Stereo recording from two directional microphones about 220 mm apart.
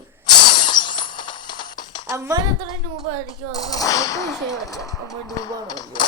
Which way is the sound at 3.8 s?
15° left (ahead or behind).